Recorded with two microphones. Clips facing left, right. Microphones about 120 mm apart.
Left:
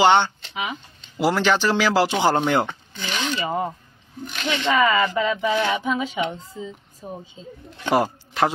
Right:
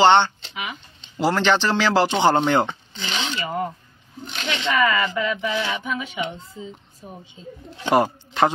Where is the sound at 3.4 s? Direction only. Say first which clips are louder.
Left 2 dB; 20° left (ahead or behind).